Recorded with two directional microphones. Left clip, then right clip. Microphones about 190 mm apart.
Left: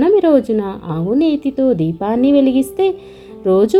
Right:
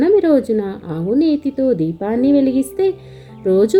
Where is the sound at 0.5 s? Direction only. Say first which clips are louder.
Left 1 dB; 40° left (ahead or behind).